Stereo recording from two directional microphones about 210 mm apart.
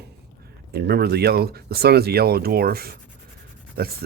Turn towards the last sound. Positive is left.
turn(degrees=-50)  # may be behind; listen again after turning